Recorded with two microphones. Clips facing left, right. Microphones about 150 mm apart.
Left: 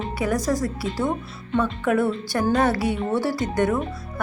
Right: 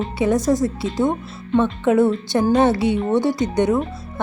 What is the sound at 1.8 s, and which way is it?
Speech, 20° right (ahead or behind).